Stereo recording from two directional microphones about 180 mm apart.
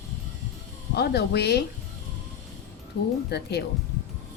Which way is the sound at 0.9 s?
65° left (ahead or behind).